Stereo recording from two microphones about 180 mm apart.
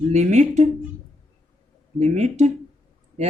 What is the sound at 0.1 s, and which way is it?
Speech, 40° right (ahead or behind).